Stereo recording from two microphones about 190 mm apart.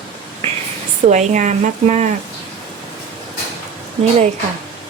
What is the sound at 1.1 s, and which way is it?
Speech, 40° right (ahead or behind).